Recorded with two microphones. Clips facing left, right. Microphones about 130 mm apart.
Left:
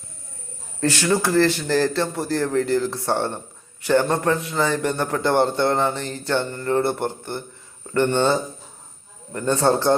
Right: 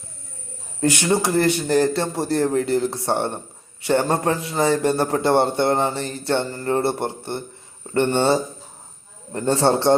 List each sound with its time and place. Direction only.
0.8 s a man's voice: 20° right (ahead or behind)
9.3 s a man's voice: 25° right (ahead or behind)